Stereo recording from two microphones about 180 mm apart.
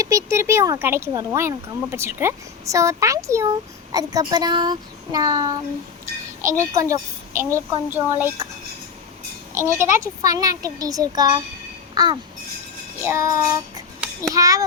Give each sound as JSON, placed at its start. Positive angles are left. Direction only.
{"t": 0.0, "sound": "a child's voice", "side_deg": -15}
{"t": 9.6, "sound": "a child's voice", "side_deg": -15}
{"t": 13.0, "sound": "child singing", "side_deg": -15}
{"t": 14.2, "sound": "a child's voice", "side_deg": -20}